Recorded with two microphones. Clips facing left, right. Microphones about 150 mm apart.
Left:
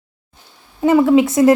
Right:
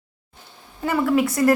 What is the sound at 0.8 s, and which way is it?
Speech, 20° left (ahead or behind).